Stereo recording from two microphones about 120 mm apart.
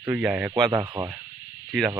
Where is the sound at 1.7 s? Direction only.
5° right (ahead or behind).